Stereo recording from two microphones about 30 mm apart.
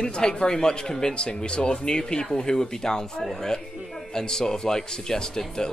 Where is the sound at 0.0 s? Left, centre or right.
Left.